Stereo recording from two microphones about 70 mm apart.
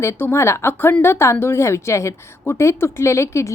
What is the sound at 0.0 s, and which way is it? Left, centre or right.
A woman's voice, left.